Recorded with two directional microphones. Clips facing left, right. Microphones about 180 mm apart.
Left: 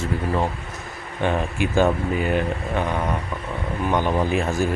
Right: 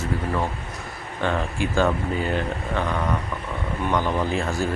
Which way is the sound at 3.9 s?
15° left (ahead or behind).